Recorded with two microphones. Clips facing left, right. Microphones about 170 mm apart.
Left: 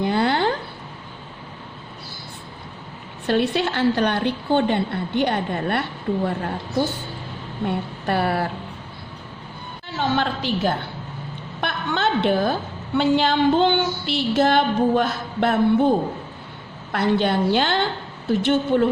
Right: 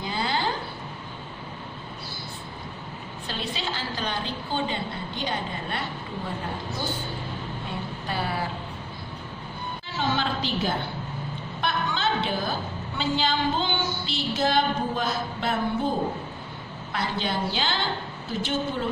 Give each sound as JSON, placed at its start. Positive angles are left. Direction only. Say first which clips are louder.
{"t": 0.0, "sound": "a sound", "louder": "left 8 dB", "side_deg": 60}
{"t": 3.2, "sound": "a woman's voice", "louder": "left 12 dB", "side_deg": 60}
{"t": 7.6, "sound": "a woman's voice", "louder": "left 8 dB", "side_deg": 60}
{"t": 10.0, "sound": "a woman's voice", "louder": "left 4 dB", "side_deg": 60}
{"t": 16.9, "sound": "a woman's voice", "louder": "left 9 dB", "side_deg": 60}